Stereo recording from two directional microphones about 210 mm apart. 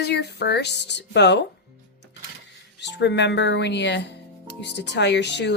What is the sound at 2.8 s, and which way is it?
Speech, 55° left (ahead or behind).